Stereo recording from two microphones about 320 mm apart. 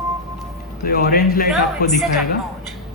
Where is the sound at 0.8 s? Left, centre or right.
Left.